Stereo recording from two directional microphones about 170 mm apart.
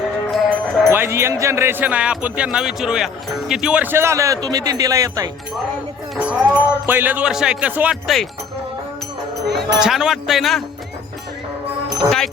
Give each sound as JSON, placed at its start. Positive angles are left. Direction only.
{"t": 0.9, "sound": "speech", "side_deg": -15}
{"t": 6.1, "sound": "speech", "side_deg": -5}
{"t": 9.6, "sound": "speech", "side_deg": -5}
{"t": 12.0, "sound": "speech", "side_deg": 0}